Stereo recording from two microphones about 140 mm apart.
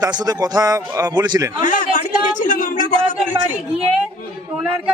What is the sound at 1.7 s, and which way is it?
A man's voice, 65° left (ahead or behind).